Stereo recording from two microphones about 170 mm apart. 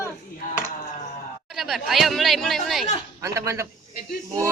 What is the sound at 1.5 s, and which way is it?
Speech, centre (ahead or behind).